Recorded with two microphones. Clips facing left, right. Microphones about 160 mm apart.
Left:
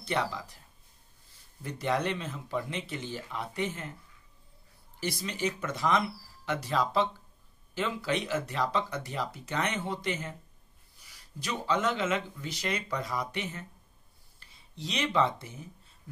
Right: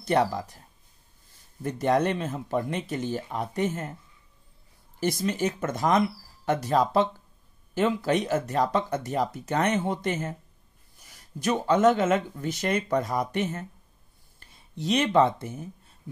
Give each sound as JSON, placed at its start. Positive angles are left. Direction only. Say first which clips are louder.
{"t": 0.0, "sound": "speech", "louder": "right 8 dB", "side_deg": -50}
{"t": 1.6, "sound": "speech", "louder": "right 7 dB", "side_deg": -50}
{"t": 5.0, "sound": "speech", "louder": "right 6 dB", "side_deg": -50}